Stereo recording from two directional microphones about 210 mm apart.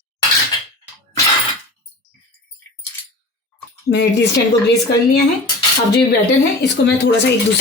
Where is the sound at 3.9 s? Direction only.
55° left (ahead or behind).